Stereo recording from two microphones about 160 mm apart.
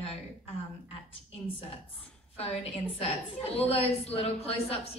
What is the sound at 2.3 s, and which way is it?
A woman's voice, 40° left (ahead or behind).